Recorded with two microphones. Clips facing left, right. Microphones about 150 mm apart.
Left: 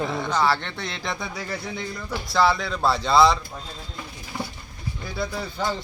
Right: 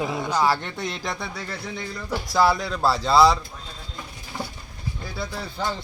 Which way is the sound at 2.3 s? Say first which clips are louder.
Even; 10° right (ahead or behind).